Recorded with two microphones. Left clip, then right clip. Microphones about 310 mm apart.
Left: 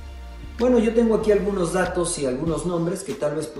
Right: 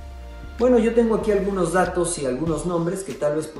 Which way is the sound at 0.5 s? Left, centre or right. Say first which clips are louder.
Right 2 dB; centre.